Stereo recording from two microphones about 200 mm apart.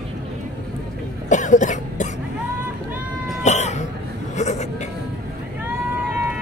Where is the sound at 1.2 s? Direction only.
40° left (ahead or behind).